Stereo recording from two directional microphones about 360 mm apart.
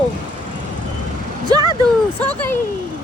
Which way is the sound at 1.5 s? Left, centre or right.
Centre.